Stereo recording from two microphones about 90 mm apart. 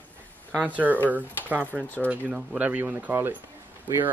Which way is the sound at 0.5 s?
15° right (ahead or behind).